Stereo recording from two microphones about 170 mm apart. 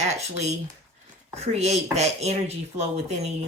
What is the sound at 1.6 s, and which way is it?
Speech, 40° right (ahead or behind).